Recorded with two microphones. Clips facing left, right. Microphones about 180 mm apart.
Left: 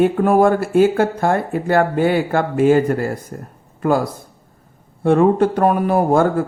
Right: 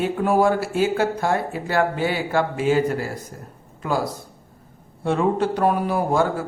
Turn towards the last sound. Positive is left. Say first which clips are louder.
# left 6 dB
turn(degrees=55)  # may be behind; listen again after turning